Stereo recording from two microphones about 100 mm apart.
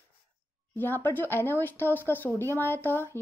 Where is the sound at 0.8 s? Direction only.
20° left (ahead or behind).